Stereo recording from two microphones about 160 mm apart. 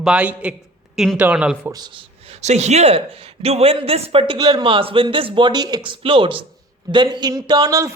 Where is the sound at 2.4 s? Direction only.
45° right (ahead or behind).